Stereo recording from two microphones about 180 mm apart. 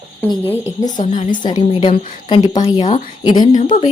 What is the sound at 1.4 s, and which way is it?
A woman's voice, 25° left (ahead or behind).